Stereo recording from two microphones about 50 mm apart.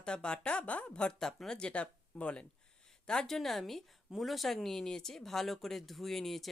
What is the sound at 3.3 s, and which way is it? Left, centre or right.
A woman's voice, centre.